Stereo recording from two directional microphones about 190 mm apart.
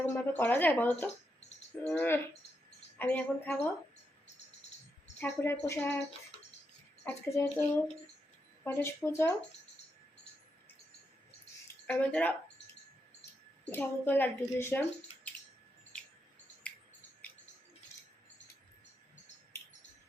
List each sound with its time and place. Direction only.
0.0 s a woman's voice: 10° left (ahead or behind)
5.2 s a woman's voice: 10° left (ahead or behind)
7.0 s a woman's voice: 15° left (ahead or behind)
8.6 s a woman's voice: 15° left (ahead or behind)
11.9 s a woman's voice: 10° left (ahead or behind)
13.7 s a woman's voice: 10° left (ahead or behind)
16.7 s a sound: 5° left (ahead or behind)